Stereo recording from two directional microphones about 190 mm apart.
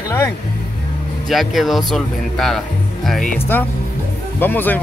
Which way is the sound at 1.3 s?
Centre (ahead or behind).